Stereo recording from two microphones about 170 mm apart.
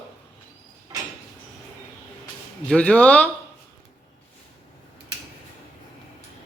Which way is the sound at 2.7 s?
10° left (ahead or behind).